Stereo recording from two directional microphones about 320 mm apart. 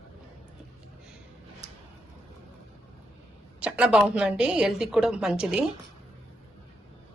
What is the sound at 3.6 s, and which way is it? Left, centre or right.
A woman's voice, centre.